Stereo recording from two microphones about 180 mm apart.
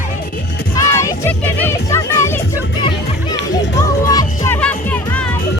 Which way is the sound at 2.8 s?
25° left (ahead or behind).